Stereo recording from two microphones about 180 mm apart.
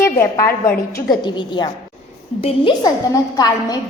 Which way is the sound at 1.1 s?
25° left (ahead or behind).